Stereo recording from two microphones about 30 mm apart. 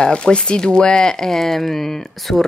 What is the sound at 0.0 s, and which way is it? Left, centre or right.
Speech, left.